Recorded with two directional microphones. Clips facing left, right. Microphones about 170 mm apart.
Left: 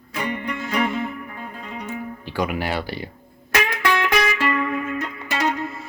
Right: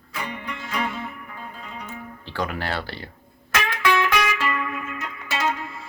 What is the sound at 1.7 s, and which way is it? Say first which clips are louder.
Music: left 10 dB; 15° left (ahead or behind).